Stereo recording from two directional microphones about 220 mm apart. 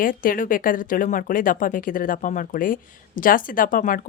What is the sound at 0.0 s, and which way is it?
A woman's voice, 40° left (ahead or behind).